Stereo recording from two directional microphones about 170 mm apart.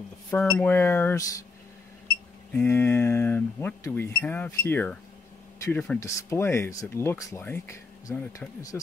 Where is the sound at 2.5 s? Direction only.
15° left (ahead or behind).